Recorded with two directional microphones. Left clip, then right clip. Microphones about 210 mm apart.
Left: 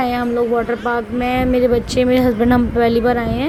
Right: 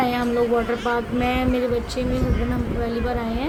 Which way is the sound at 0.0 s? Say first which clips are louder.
Left 3 dB; 25° left (ahead or behind).